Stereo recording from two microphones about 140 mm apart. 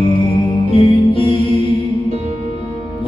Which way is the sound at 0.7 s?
40° left (ahead or behind).